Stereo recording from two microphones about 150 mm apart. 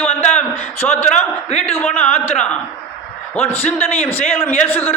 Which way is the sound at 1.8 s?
10° left (ahead or behind).